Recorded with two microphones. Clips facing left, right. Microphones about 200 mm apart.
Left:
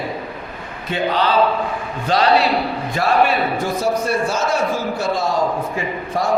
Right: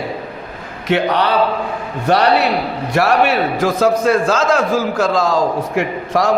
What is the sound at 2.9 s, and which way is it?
A man's voice, 75° right (ahead or behind).